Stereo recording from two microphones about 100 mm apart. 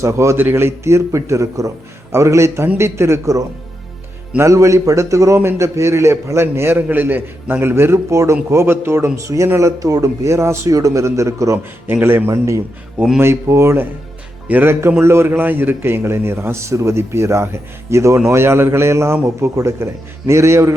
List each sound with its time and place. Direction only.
0.0 s a man's voice: 30° right (ahead or behind)
11.9 s a man's voice: 20° right (ahead or behind)